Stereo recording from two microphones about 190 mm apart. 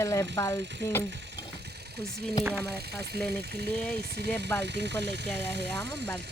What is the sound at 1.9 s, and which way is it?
Speech, 60° right (ahead or behind).